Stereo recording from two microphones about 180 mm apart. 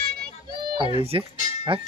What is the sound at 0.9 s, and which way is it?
Speech, 30° right (ahead or behind).